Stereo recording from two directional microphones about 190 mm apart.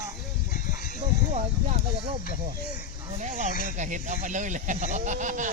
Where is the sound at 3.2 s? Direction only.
40° right (ahead or behind).